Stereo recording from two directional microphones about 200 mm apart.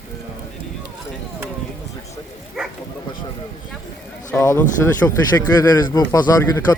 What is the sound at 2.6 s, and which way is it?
Speech, 5° right (ahead or behind).